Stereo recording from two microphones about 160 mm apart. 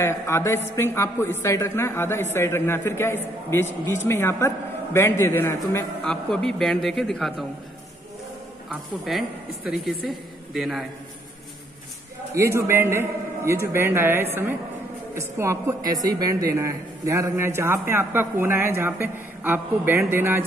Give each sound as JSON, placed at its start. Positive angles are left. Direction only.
{"t": 0.0, "sound": "a woman's voice", "side_deg": 15}
{"t": 6.0, "sound": "a man's voice", "side_deg": 5}
{"t": 8.6, "sound": "a man's voice", "side_deg": 0}
{"t": 12.4, "sound": "a woman's voice", "side_deg": -15}